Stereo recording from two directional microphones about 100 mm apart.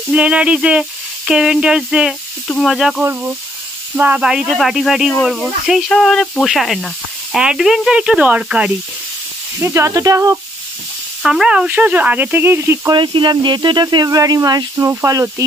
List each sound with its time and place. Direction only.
0.1 s speech: 10° right (ahead or behind)
3.0 s speech: 20° right (ahead or behind)
9.6 s speech: 25° right (ahead or behind)
11.2 s speech: 5° right (ahead or behind); by 12.9 s 25° right (ahead or behind)
12.9 s speech: 55° right (ahead or behind); by 15.2 s 30° right (ahead or behind)